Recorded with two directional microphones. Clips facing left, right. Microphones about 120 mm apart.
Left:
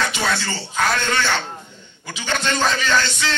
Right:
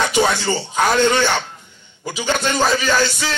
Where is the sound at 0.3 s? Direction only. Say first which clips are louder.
Right 4 dB; 15° right (ahead or behind).